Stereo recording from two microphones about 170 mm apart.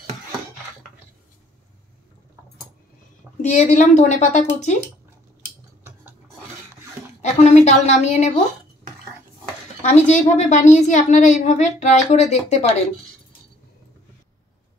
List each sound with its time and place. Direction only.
3.4 s a woman's voice: 45° left (ahead or behind)
7.2 s a woman's voice: 40° left (ahead or behind)
9.8 s a woman's voice: 45° left (ahead or behind)